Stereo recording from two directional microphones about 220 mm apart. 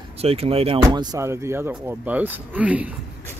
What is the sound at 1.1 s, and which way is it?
Speech, 10° right (ahead or behind).